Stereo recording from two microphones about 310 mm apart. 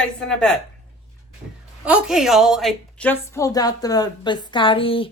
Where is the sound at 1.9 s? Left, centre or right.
Centre.